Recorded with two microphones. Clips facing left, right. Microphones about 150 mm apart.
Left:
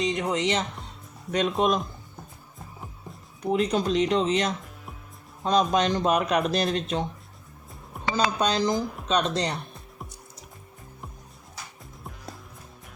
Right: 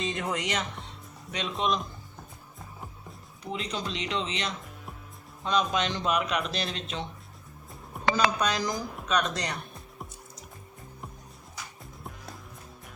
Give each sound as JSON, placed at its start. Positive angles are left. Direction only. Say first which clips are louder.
{"t": 0.0, "sound": "speech", "louder": "left 6 dB", "side_deg": 20}
{"t": 1.3, "sound": "speech", "louder": "left 6 dB", "side_deg": 50}
{"t": 3.4, "sound": "speech", "louder": "left 10 dB", "side_deg": 50}
{"t": 7.9, "sound": "a sound", "louder": "right 3 dB", "side_deg": 0}
{"t": 8.4, "sound": "speech", "louder": "left 4 dB", "side_deg": 30}
{"t": 8.7, "sound": "speech", "louder": "left 7 dB", "side_deg": 0}
{"t": 9.0, "sound": "speech", "louder": "left 3 dB", "side_deg": 30}